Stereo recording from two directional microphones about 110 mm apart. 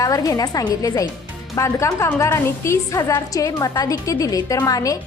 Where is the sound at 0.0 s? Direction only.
30° left (ahead or behind).